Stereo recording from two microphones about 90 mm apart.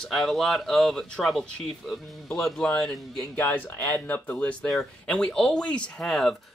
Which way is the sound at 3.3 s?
25° left (ahead or behind).